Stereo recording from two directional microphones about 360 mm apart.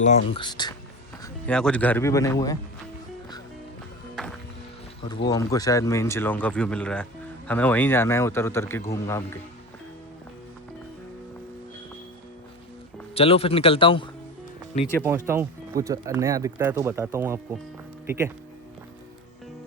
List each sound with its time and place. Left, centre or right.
0.0 s speech: centre
4.1 s music: centre
5.0 s speech: centre
13.1 s speech: centre
15.0 s speech: centre